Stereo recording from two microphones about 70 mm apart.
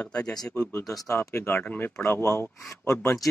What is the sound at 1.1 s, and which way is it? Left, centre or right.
Speech, left.